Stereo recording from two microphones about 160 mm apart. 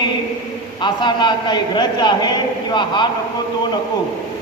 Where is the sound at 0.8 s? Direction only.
30° left (ahead or behind).